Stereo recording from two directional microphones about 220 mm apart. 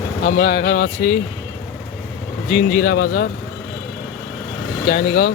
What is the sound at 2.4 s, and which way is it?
Speech, 35° left (ahead or behind).